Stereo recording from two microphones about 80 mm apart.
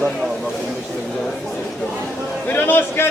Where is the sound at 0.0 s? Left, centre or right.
Centre.